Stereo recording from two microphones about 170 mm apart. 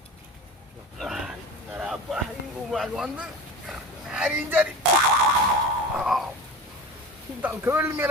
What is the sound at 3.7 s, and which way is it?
Dog, 5° right (ahead or behind).